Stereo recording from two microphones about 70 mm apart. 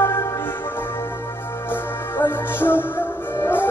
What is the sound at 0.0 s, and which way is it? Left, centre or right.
Music, left.